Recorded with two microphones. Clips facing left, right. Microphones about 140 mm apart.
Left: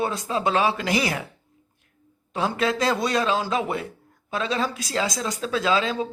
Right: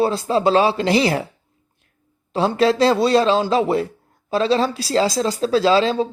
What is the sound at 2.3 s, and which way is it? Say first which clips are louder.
Speech: right 7 dB; 30° right (ahead or behind).